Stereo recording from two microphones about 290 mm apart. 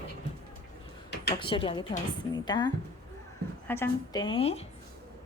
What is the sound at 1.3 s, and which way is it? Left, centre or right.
A woman's voice, centre.